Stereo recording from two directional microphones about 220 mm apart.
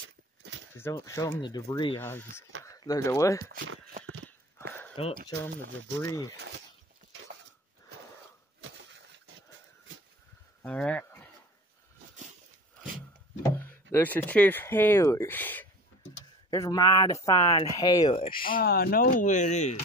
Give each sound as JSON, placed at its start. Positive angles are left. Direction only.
{"t": 0.0, "sound": "a sound", "side_deg": -55}
{"t": 0.7, "sound": "speech", "side_deg": 10}
{"t": 3.5, "sound": "speech", "side_deg": -60}
{"t": 4.9, "sound": "speech", "side_deg": 25}
{"t": 10.6, "sound": "livestock", "side_deg": 5}
{"t": 13.4, "sound": "speech", "side_deg": 10}
{"t": 18.4, "sound": "speech", "side_deg": 40}